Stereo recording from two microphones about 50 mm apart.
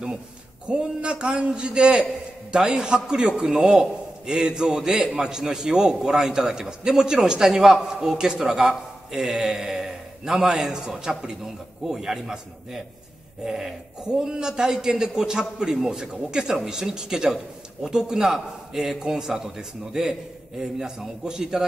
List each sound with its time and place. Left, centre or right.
0.7 s a man's voice: centre
13.4 s a man's voice: centre